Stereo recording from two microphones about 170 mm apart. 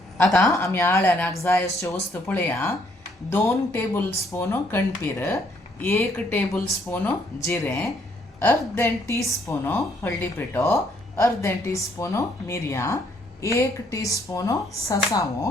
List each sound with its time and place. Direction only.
0.2 s a woman's voice: 5° left (ahead or behind)